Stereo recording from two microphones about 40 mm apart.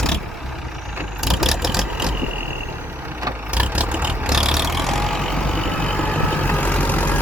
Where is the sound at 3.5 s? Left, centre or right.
Right.